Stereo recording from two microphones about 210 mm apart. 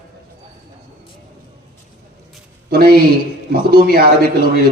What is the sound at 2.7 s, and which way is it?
A man's voice, 45° right (ahead or behind).